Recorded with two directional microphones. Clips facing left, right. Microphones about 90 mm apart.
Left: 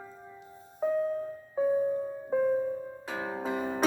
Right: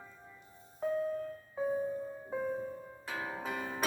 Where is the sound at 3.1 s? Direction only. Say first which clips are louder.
Left 6 dB; 25° left (ahead or behind).